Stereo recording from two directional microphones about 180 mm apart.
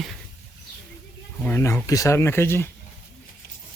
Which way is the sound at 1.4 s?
15° left (ahead or behind).